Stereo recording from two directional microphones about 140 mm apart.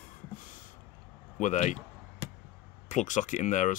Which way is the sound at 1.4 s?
60° left (ahead or behind).